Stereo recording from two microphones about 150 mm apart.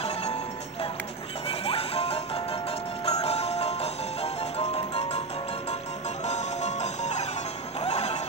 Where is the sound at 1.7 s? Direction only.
40° left (ahead or behind).